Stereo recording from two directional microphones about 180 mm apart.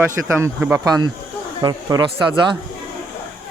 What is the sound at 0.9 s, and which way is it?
Speech, 20° right (ahead or behind).